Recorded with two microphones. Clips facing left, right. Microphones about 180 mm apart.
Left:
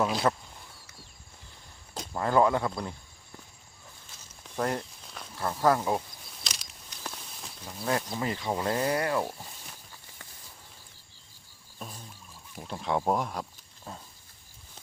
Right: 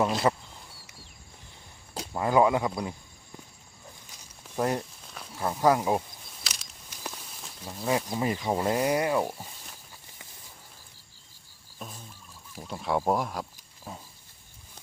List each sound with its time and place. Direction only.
0.0 s speech: 5° right (ahead or behind)
2.0 s speech: 10° right (ahead or behind)
4.4 s speech: 15° right (ahead or behind)
5.0 s a sound: centre (ahead or behind)
5.4 s speech: 15° right (ahead or behind)
6.4 s a sound: centre (ahead or behind)
7.9 s speech: 15° right (ahead or behind)
11.8 s a sound: centre (ahead or behind)
12.5 s speech: centre (ahead or behind)